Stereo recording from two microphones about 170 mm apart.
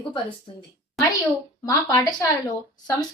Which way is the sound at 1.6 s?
20° left (ahead or behind).